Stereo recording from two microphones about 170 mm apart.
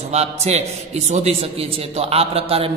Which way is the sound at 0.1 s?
40° right (ahead or behind).